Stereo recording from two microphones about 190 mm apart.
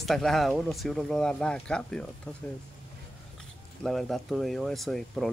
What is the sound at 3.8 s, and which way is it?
Speech, centre (ahead or behind).